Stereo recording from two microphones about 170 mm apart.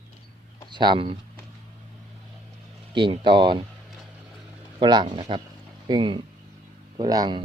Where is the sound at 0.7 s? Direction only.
25° right (ahead or behind).